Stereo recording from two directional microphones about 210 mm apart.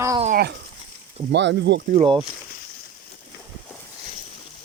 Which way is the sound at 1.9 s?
25° right (ahead or behind).